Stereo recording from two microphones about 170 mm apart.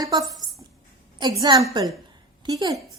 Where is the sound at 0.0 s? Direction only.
20° right (ahead or behind).